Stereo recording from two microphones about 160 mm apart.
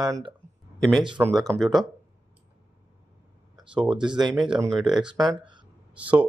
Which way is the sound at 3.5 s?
30° right (ahead or behind).